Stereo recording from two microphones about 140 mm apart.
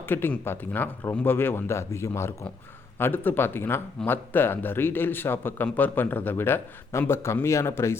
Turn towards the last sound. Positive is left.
turn(degrees=20)  # may be behind; listen again after turning